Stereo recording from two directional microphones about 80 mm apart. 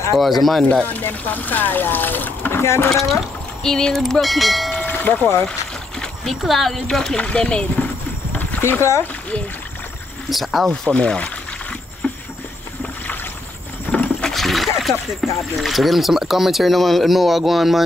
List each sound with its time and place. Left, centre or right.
0.2 s speech: centre
0.8 s speech: left
2.6 s speech: left
2.9 s speech: centre
4.7 s a sound: left
5.9 s speech: centre
8.4 s horse: left
10.3 s speech: centre
10.7 s speech: centre
12.0 s a sound: centre
13.9 s a sound: centre
14.3 s splash: centre
15.5 s speech: centre